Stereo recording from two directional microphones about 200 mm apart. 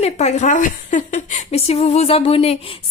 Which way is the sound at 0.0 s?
35° left (ahead or behind).